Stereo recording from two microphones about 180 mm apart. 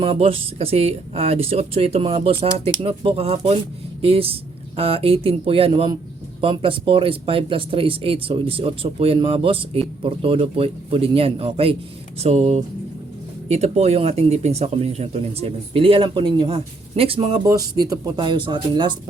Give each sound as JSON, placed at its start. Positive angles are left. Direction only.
{"t": 0.0, "sound": "speech", "side_deg": -30}